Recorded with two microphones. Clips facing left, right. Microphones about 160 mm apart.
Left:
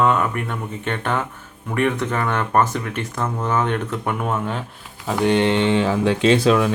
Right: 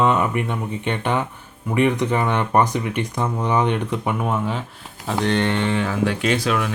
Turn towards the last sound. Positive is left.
turn(degrees=30)  # may be behind; listen again after turning